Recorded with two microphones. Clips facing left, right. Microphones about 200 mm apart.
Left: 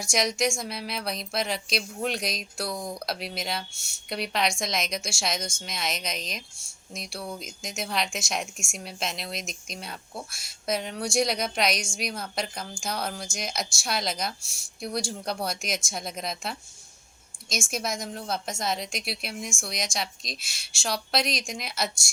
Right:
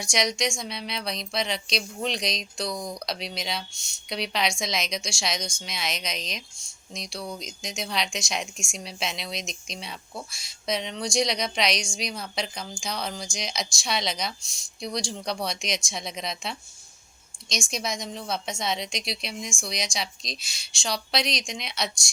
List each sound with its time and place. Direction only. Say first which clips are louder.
0.0 s a woman's voice: left 1 dB; centre (ahead or behind)